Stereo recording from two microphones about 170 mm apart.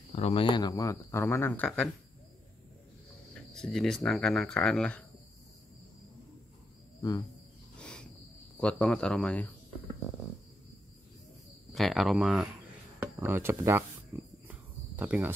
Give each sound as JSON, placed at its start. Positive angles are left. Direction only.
{"t": 0.1, "sound": "speech", "side_deg": 35}
{"t": 3.5, "sound": "speech", "side_deg": 5}
{"t": 7.0, "sound": "speech", "side_deg": 20}
{"t": 8.5, "sound": "speech", "side_deg": 5}
{"t": 11.7, "sound": "speech", "side_deg": 0}
{"t": 14.1, "sound": "a sound", "side_deg": -15}
{"t": 14.5, "sound": "cricket", "side_deg": -10}